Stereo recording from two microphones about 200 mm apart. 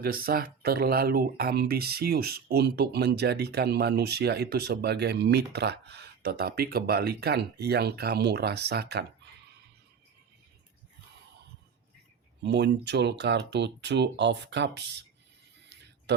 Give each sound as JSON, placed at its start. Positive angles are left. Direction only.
{"t": 0.0, "sound": "speech", "side_deg": -50}
{"t": 12.4, "sound": "speech", "side_deg": -60}
{"t": 16.1, "sound": "speech", "side_deg": -55}